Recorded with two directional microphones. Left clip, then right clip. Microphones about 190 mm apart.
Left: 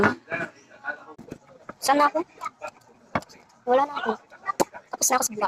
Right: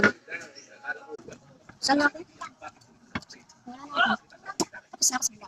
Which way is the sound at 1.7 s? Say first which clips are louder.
Left 4 dB; 15° left (ahead or behind).